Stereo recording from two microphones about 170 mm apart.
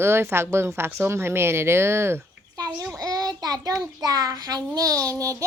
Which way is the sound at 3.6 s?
20° right (ahead or behind).